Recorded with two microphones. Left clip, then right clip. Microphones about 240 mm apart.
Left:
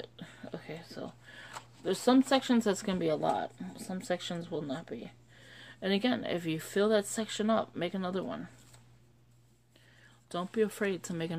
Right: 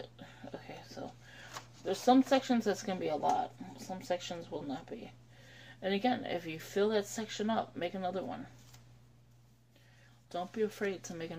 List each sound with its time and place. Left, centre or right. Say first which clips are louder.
0.2 s music: left 3 dB; left
1.9 s speech: left 1 dB; left
10.3 s speech: left 4 dB; left